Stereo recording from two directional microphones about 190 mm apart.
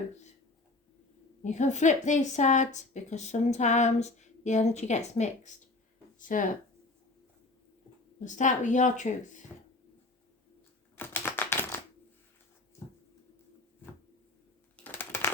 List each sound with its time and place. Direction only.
1.5 s a woman's voice: 40° left (ahead or behind)
8.2 s a woman's voice: 40° left (ahead or behind)
10.9 s typewriter: 10° left (ahead or behind)
14.8 s a sound: 10° left (ahead or behind)